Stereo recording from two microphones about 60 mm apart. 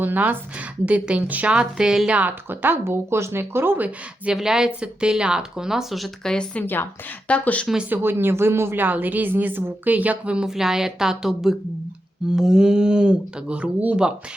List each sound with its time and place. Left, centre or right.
0.0 s speech: right
0.9 s a woman's voice: right
2.1 s speech: right
4.4 s speech: centre
6.2 s speech: centre
6.6 s a woman's voice: left
7.3 s speech: left
7.9 s speech: right; by 14.1 s centre